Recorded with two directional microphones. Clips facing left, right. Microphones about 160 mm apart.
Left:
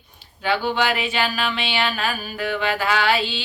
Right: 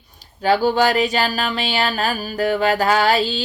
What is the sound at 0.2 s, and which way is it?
Speech, 40° right (ahead or behind).